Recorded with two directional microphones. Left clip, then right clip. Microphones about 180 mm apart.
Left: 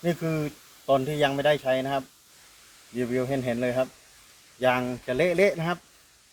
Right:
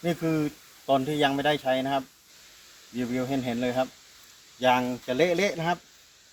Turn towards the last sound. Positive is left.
turn(degrees=20)  # may be behind; listen again after turning